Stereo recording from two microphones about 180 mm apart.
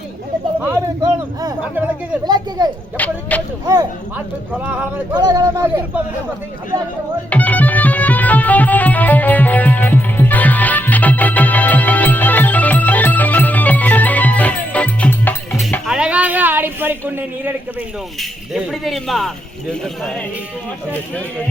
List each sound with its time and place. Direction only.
2.2 s a man's voice: 25° right (ahead or behind)
3.0 s speech: 10° left (ahead or behind)
4.5 s speech: 10° right (ahead or behind)
5.1 s a man's voice: 20° right (ahead or behind)
7.3 s music: 10° left (ahead or behind); by 17.5 s 10° right (ahead or behind)
18.2 s speech: centre (ahead or behind)